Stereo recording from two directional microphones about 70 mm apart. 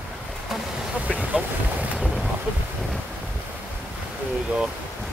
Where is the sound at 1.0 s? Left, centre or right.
Centre.